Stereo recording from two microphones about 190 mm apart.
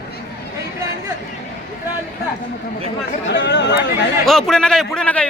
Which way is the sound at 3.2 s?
70° left (ahead or behind).